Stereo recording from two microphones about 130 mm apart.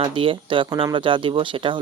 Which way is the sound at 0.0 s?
40° right (ahead or behind).